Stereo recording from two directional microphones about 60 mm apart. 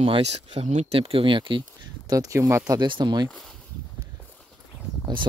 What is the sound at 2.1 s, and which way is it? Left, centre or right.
Speech, right.